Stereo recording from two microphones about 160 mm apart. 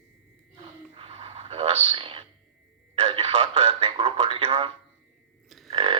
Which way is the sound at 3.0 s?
35° right (ahead or behind).